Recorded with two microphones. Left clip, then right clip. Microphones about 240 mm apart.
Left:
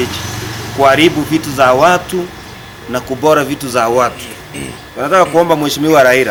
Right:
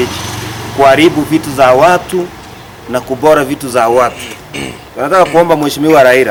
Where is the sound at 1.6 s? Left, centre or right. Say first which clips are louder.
Right 2 dB; centre.